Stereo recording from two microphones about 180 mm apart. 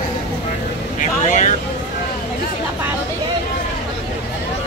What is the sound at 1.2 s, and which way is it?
Vehicle, 40° left (ahead or behind).